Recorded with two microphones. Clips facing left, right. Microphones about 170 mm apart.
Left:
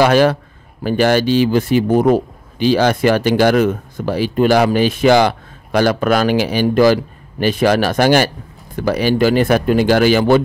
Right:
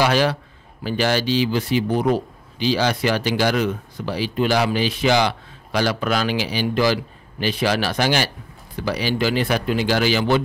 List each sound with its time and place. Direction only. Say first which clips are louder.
0.0 s speech: left 7 dB; 50° left (ahead or behind)